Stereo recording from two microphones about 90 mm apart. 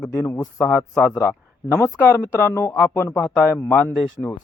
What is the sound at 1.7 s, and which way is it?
Speech, 30° left (ahead or behind).